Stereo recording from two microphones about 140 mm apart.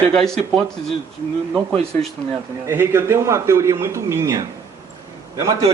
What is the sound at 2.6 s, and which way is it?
A man's voice, 20° right (ahead or behind).